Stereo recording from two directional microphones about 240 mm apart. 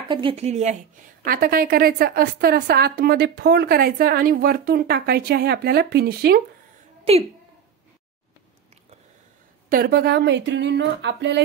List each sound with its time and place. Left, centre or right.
0.1 s a woman's voice: right
7.1 s a woman's voice: right
9.7 s a woman's voice: right